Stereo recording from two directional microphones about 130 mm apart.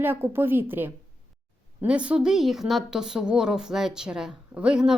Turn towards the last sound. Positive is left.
turn(degrees=-5)  # may be behind; listen again after turning